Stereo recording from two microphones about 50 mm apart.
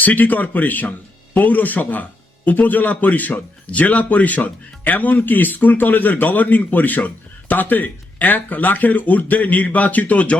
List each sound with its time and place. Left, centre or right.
0.0 s speech: left